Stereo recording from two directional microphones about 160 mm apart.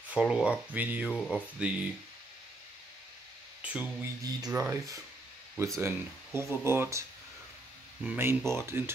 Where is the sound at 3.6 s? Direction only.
5° right (ahead or behind).